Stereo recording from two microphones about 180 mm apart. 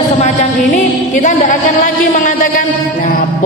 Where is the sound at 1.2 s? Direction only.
45° left (ahead or behind).